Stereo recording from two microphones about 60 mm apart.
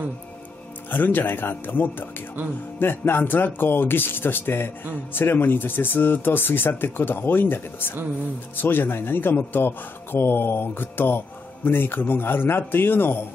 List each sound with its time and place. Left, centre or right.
0.8 s speech: left